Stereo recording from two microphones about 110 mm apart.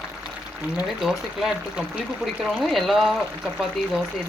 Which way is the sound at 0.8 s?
5° right (ahead or behind).